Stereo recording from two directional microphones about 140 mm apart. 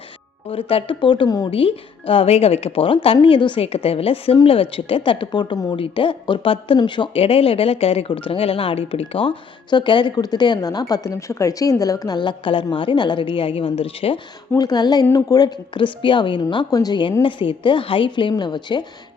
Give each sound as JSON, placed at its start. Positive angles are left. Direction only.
{"t": 0.4, "sound": "speech", "side_deg": 40}
{"t": 1.5, "sound": "speech", "side_deg": 40}
{"t": 14.5, "sound": "speech", "side_deg": 30}